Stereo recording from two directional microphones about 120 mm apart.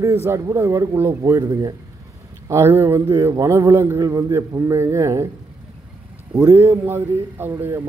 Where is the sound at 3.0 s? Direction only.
30° right (ahead or behind).